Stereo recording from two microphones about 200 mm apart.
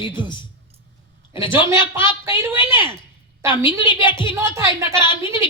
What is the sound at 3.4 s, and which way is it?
Speech, 25° left (ahead or behind).